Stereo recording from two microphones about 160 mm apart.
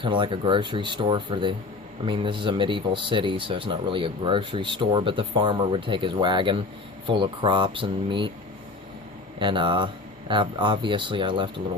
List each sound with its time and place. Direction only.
0.0 s speech: 30° right (ahead or behind)
9.4 s speech: 30° right (ahead or behind)